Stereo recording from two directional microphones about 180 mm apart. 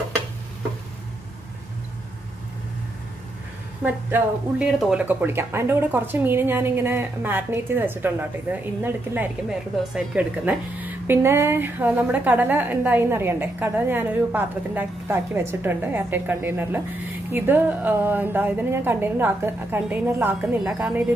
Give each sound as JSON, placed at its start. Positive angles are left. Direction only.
{"t": 3.8, "sound": "speech", "side_deg": -5}